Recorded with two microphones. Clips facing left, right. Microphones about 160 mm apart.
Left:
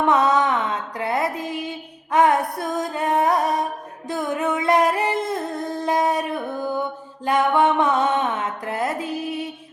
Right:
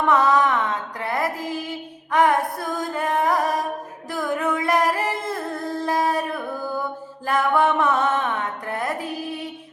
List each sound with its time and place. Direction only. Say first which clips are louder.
0.0 s music: even; 20° left (ahead or behind)
4.1 s singing: left 1 dB; 25° left (ahead or behind)
5.8 s a sound: left 2 dB; 20° left (ahead or behind)
7.3 s music: left 2 dB; 20° left (ahead or behind)